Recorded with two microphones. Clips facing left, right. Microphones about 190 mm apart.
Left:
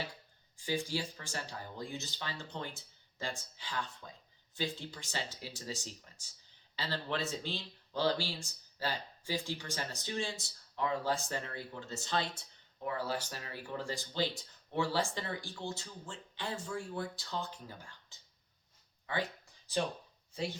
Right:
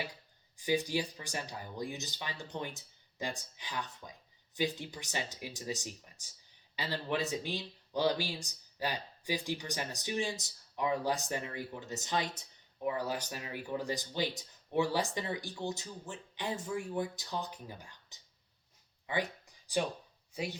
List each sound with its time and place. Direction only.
0.5 s speech: 20° right (ahead or behind)
19.0 s a sound: 15° right (ahead or behind)
20.3 s speech: 15° right (ahead or behind)